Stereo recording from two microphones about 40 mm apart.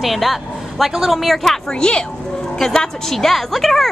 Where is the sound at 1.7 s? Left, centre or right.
Centre.